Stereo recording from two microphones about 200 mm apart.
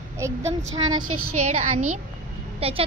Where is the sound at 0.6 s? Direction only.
90° right.